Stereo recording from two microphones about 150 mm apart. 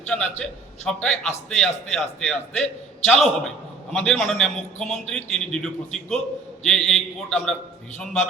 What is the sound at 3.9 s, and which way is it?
A man's voice, 5° left (ahead or behind).